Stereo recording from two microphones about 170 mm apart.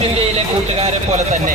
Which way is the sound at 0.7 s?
35° right (ahead or behind).